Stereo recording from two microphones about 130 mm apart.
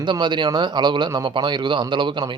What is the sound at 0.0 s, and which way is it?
Speech, 35° right (ahead or behind).